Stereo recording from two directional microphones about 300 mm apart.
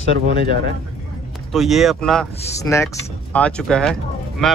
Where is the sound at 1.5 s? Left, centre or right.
Centre.